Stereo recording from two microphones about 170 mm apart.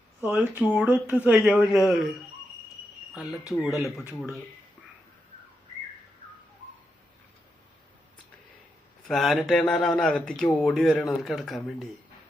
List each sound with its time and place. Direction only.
0.2 s speech: 5° right (ahead or behind)
3.8 s speech: centre (ahead or behind)
9.0 s speech: centre (ahead or behind)